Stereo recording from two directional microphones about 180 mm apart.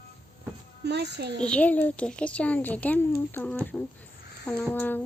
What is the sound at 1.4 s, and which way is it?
A woman's voice, 5° left (ahead or behind).